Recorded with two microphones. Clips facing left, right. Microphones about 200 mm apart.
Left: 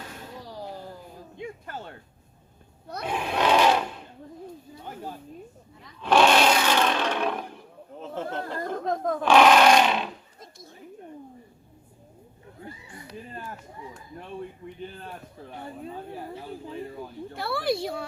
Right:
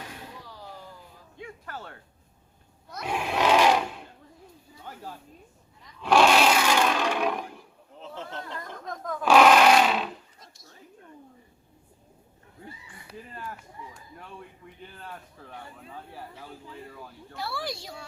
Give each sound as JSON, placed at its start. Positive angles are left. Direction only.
{"t": 1.4, "sound": "music", "side_deg": 20}
{"t": 3.1, "sound": "sewing machine", "side_deg": -5}
{"t": 6.0, "sound": "a sound", "side_deg": -10}
{"t": 7.9, "sound": "speech", "side_deg": 50}
{"t": 8.8, "sound": "speech", "side_deg": 30}
{"t": 9.2, "sound": "speech", "side_deg": -5}
{"t": 14.6, "sound": "a man's voice", "side_deg": 25}
{"t": 17.3, "sound": "speech", "side_deg": 55}